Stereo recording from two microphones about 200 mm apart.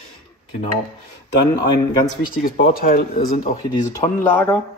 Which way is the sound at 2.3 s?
45° left (ahead or behind).